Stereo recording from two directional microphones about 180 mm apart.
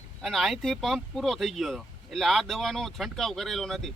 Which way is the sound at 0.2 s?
Centre (ahead or behind).